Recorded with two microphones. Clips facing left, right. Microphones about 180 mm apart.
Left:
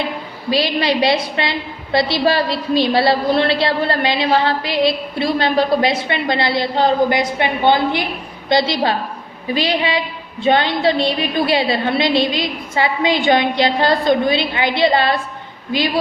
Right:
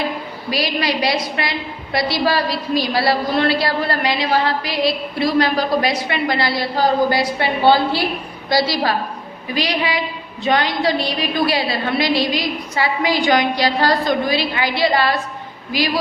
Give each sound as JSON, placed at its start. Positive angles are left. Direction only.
{"t": 0.5, "sound": "a woman's voice", "side_deg": 25}